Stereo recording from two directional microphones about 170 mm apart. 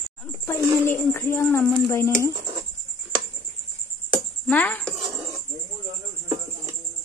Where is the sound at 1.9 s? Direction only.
15° left (ahead or behind).